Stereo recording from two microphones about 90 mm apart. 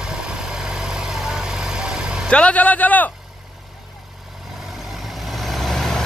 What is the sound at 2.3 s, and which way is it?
Speech, 15° left (ahead or behind).